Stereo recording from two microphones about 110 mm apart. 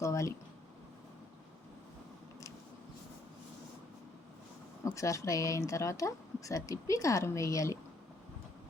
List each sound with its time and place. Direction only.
0.0 s speech: 30° left (ahead or behind)
4.9 s speech: 30° left (ahead or behind)